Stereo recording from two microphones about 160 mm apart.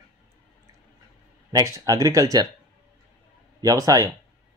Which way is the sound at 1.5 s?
20° right (ahead or behind).